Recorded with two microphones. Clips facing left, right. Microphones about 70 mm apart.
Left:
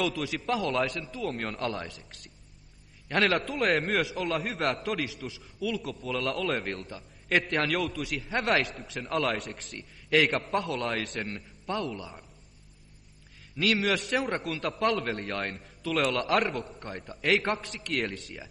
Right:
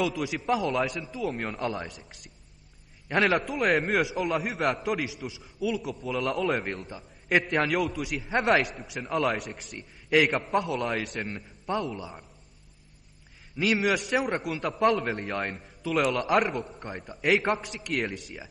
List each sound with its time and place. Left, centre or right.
0.1 s a man's voice: centre
3.2 s a man's voice: centre
4.0 s a man's voice: centre
7.9 s a man's voice: centre
13.6 s a man's voice: centre